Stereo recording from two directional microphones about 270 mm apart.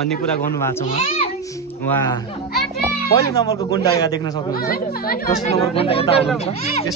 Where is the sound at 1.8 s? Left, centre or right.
Centre.